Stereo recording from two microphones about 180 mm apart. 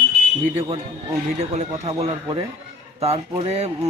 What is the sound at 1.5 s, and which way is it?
Speech, 35° right (ahead or behind).